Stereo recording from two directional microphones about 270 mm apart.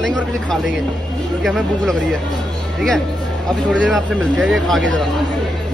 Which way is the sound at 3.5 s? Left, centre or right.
Centre.